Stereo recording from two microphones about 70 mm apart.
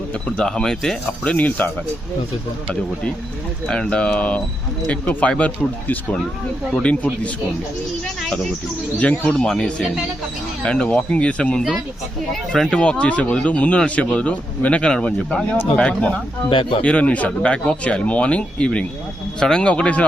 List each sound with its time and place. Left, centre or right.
0.3 s speech: centre
1.2 s speech: centre
3.7 s speech: centre
6.8 s speech: left
9.0 s speech: centre